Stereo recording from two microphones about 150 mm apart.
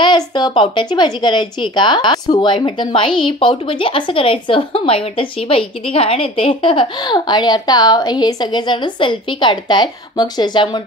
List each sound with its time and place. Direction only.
0.0 s a child's voice: 30° left (ahead or behind)